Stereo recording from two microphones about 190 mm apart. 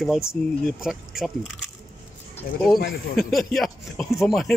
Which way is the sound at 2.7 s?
55° left (ahead or behind).